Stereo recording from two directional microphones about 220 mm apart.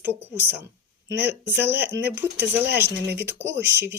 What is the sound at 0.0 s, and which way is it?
Speech, 10° right (ahead or behind).